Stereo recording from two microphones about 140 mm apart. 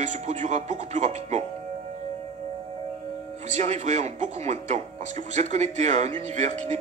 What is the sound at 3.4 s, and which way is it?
Speech, 55° right (ahead or behind).